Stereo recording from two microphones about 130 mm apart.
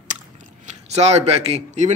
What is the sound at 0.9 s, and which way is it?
Speech, 55° right (ahead or behind).